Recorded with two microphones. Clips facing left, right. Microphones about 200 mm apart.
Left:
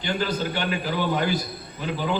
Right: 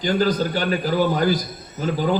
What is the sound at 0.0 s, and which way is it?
A man's voice, 40° right (ahead or behind).